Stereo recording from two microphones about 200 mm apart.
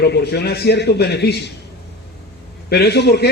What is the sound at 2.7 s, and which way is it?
Speech, 55° left (ahead or behind).